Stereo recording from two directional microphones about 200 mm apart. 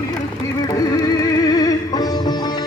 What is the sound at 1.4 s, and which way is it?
Music, 20° left (ahead or behind).